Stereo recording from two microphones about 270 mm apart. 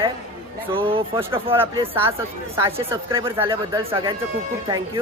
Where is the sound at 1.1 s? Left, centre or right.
Centre.